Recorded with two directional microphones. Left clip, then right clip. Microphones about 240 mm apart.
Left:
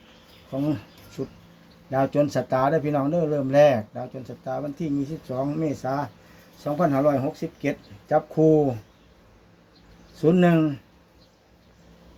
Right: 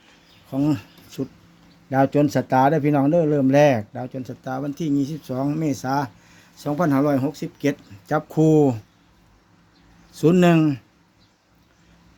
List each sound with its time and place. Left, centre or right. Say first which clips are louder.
0.5 s speech: right 4 dB; right
1.9 s speech: right 3 dB; right
10.2 s speech: right 3 dB; right